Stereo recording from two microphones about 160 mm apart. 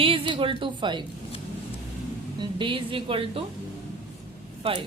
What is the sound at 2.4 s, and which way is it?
A woman's voice, 30° right (ahead or behind).